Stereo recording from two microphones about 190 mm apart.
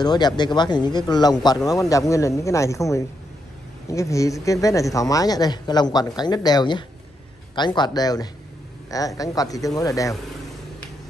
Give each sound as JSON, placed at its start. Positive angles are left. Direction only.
{"t": 0.0, "sound": "speech", "side_deg": 20}